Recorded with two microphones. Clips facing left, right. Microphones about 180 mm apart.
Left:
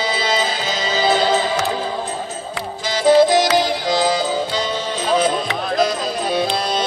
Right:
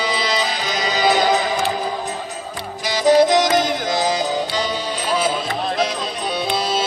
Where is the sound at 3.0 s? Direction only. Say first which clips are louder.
Left 1 dB; 20° right (ahead or behind).